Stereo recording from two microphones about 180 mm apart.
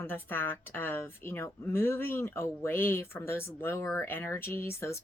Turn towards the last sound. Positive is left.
turn(degrees=15)  # may be behind; listen again after turning